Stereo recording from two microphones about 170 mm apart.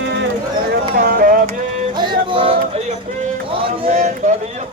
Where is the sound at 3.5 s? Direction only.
35° right (ahead or behind).